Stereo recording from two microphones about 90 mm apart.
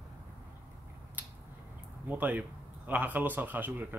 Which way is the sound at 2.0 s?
20° right (ahead or behind).